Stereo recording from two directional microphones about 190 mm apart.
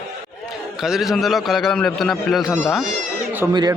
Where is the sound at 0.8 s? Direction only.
Centre (ahead or behind).